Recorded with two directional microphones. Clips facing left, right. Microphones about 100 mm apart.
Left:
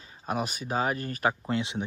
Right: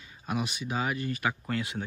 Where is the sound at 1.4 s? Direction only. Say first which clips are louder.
Left 3 dB; 20° left (ahead or behind).